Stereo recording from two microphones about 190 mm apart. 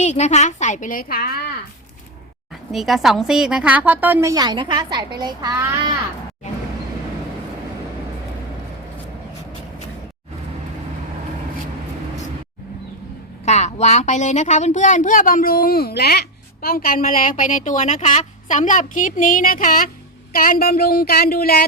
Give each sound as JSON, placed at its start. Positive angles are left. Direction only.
{"t": 0.0, "sound": "a woman's voice", "side_deg": 35}
{"t": 2.7, "sound": "a woman's voice", "side_deg": 0}
{"t": 13.4, "sound": "speech", "side_deg": 35}